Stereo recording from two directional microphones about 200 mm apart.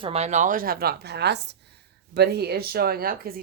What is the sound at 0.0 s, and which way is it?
A woman's voice, 30° right (ahead or behind).